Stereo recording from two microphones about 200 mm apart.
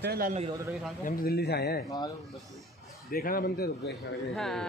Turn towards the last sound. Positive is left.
turn(degrees=0)  # may be behind; listen again after turning